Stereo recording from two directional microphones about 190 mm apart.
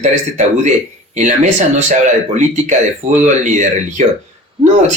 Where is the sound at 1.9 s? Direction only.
40° right (ahead or behind).